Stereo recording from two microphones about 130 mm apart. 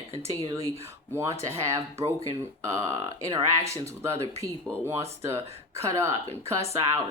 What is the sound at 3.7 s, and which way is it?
Speech, 20° right (ahead or behind).